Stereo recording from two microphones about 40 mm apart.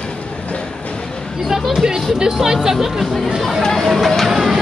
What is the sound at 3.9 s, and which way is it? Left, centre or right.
Music, centre.